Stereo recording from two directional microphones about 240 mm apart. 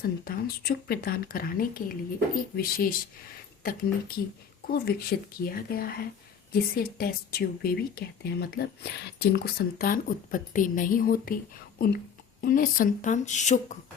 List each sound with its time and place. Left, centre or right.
0.0 s a woman's voice: left